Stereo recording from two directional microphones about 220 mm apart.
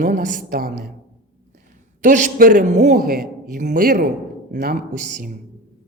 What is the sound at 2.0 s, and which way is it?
A man's voice, 35° right (ahead or behind).